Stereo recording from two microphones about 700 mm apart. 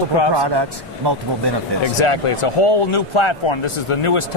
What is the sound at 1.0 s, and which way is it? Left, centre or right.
Speech, right.